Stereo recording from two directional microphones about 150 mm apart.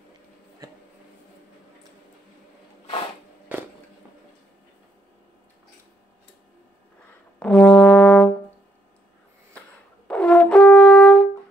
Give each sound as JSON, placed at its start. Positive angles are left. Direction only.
{"t": 0.6, "sound": "a sound", "side_deg": -20}
{"t": 7.3, "sound": "brass instrument", "side_deg": 5}
{"t": 10.0, "sound": "brass instrument", "side_deg": 5}